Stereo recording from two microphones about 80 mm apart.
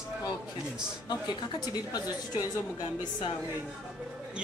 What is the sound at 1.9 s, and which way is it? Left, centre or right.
Speech, left.